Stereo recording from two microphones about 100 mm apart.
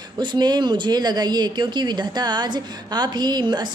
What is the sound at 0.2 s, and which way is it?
Speech, 45° right (ahead or behind).